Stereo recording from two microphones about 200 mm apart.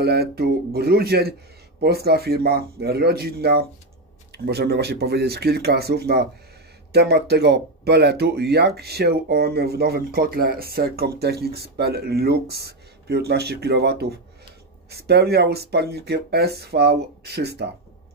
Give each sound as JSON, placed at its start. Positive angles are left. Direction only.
{"t": 0.0, "sound": "speech", "side_deg": -55}